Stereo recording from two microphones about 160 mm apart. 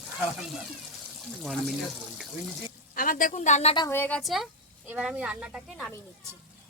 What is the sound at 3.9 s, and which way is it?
Speech, 10° left (ahead or behind).